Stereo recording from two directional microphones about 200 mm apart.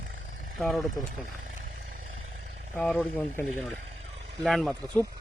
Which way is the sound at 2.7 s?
Centre (ahead or behind).